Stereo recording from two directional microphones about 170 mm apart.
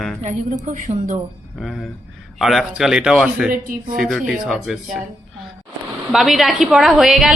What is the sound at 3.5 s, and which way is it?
Speech, 55° right (ahead or behind).